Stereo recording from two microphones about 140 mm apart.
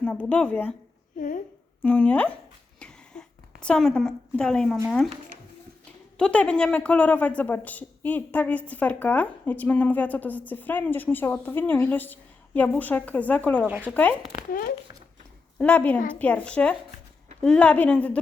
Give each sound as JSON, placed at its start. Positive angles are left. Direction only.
{"t": 0.0, "sound": "a woman's voice", "side_deg": 10}
{"t": 1.8, "sound": "a woman's voice", "side_deg": 10}
{"t": 2.7, "sound": "a sound", "side_deg": 5}
{"t": 4.9, "sound": "speech", "side_deg": 5}
{"t": 6.1, "sound": "a woman's voice", "side_deg": 10}
{"t": 13.6, "sound": "speech", "side_deg": -10}
{"t": 13.8, "sound": "a woman's voice", "side_deg": 10}
{"t": 14.5, "sound": "a child's voice", "side_deg": 90}
{"t": 15.5, "sound": "a woman's voice", "side_deg": 10}